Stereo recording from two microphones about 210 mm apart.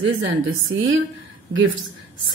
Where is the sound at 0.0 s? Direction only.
75° right (ahead or behind).